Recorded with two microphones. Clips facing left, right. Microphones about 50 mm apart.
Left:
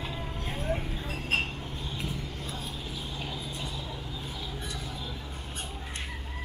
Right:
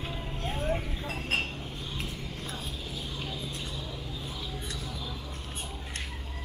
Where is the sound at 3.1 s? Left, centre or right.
Centre.